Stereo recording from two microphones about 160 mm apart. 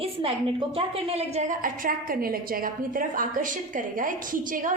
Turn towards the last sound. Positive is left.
turn(degrees=-55)  # may be behind; listen again after turning